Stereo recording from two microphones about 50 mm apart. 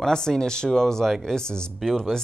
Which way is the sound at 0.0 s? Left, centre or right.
Centre.